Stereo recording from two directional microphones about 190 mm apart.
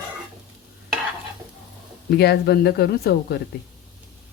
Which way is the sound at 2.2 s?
60° left (ahead or behind).